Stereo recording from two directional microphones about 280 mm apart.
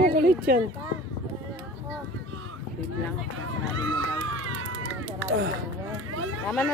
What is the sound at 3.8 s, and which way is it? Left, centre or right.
Run, right.